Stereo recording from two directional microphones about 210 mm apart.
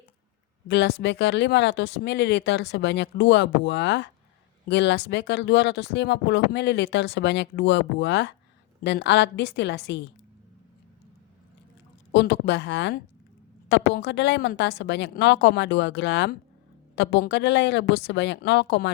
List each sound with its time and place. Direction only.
0.7 s speech: 55° left (ahead or behind)
12.1 s speech: 55° left (ahead or behind)